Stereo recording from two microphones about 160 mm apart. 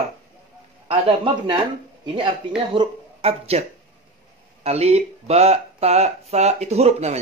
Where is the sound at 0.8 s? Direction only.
35° right (ahead or behind).